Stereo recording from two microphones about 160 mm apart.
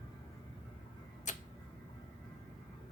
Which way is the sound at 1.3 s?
50° left (ahead or behind).